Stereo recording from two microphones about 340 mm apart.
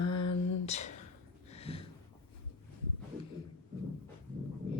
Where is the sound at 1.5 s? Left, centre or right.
Centre.